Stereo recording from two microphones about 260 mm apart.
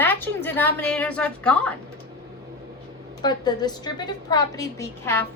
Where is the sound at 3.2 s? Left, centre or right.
Centre.